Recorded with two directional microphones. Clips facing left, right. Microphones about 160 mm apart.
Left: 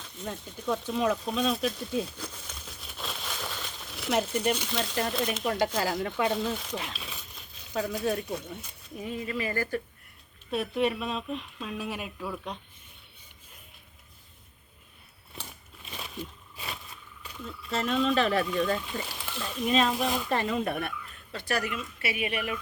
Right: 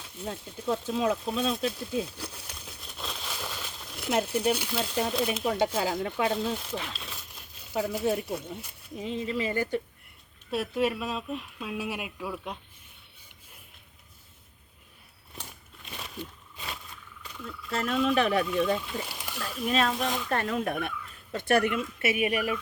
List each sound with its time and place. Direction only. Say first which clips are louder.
0.0 s speech: right 1 dB; 10° right (ahead or behind)
5.9 s speech: even; centre (ahead or behind)
6.7 s crumpling: even; 5° left (ahead or behind); by 8.2 s 10° right (ahead or behind)
9.0 s speech: right 2 dB; 25° right (ahead or behind)
10.5 s speech: even; centre (ahead or behind)
15.8 s crumpling: even; centre (ahead or behind)
16.6 s a sound: even; 5° left (ahead or behind)
17.4 s speech: even; centre (ahead or behind)
20.7 s speech: even; 10° right (ahead or behind)
21.3 s speech: right 6 dB; 55° right (ahead or behind)
22.2 s a woman's voice: right 4 dB; 40° right (ahead or behind)